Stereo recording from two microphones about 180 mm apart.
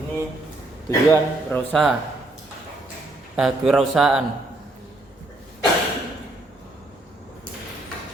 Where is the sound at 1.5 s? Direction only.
10° left (ahead or behind).